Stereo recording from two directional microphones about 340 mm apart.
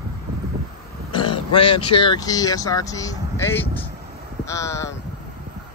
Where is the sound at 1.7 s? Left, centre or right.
Centre.